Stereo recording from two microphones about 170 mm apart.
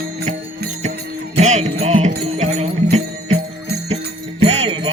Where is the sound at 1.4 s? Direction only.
40° right (ahead or behind).